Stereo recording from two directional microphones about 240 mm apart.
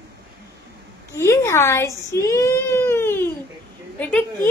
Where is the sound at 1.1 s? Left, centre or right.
Centre.